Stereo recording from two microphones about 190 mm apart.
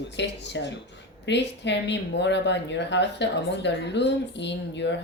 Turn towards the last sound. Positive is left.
turn(degrees=65)  # may be behind; listen again after turning